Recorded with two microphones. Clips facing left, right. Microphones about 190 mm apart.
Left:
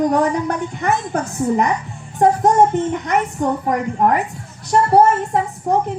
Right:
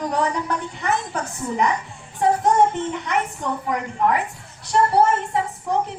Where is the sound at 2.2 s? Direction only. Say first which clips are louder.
Left 4 dB; 45° left (ahead or behind).